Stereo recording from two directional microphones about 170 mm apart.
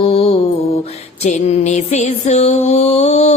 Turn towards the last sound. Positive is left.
turn(degrees=40)  # may be behind; listen again after turning